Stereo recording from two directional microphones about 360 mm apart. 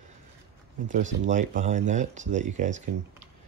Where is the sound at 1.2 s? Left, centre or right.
Centre.